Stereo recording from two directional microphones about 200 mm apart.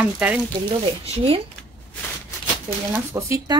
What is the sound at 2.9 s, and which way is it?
Speech, 15° right (ahead or behind).